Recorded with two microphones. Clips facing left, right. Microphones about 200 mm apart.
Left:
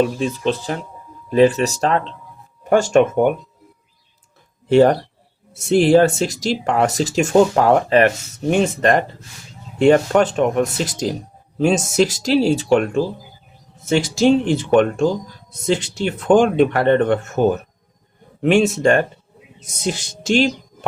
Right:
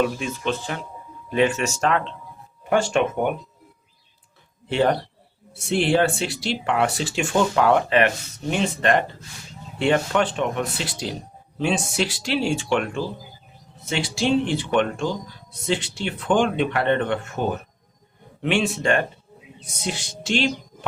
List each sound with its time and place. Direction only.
0.0 s speech: 35° left (ahead or behind)
4.7 s speech: 45° left (ahead or behind)
18.4 s speech: 45° left (ahead or behind)